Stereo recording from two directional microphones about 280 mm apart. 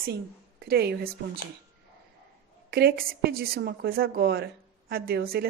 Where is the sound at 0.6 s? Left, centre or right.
Right.